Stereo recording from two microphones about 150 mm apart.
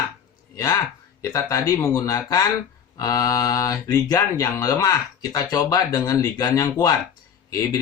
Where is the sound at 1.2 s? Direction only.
25° left (ahead or behind).